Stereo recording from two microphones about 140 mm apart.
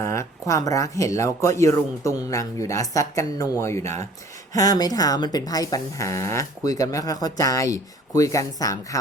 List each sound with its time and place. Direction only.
0.0 s speech: 20° left (ahead or behind)